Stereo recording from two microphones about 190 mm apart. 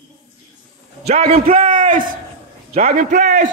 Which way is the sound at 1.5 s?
45° right (ahead or behind).